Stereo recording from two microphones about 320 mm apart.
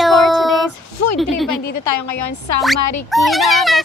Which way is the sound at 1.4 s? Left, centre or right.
Left.